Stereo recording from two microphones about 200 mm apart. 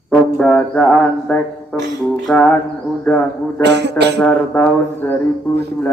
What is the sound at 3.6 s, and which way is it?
Speech, 60° right (ahead or behind).